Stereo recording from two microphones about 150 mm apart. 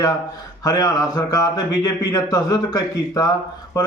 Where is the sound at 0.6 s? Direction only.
25° left (ahead or behind).